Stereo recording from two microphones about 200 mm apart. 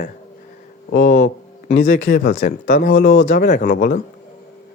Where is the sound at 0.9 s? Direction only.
60° left (ahead or behind).